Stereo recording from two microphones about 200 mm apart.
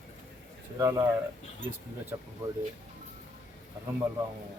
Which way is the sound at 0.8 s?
15° right (ahead or behind).